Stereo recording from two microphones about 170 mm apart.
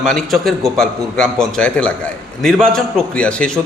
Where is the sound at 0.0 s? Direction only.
5° left (ahead or behind).